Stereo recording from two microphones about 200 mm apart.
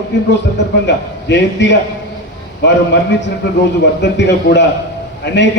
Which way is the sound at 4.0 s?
60° left (ahead or behind).